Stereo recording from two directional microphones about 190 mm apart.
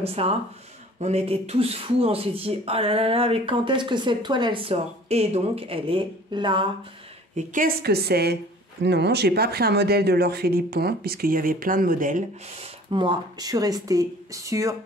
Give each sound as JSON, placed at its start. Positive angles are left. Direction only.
{"t": 0.0, "sound": "speech", "side_deg": -30}
{"t": 7.3, "sound": "speech", "side_deg": -45}
{"t": 12.9, "sound": "speech", "side_deg": -20}